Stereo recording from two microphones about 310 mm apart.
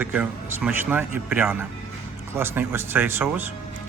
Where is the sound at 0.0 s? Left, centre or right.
Centre.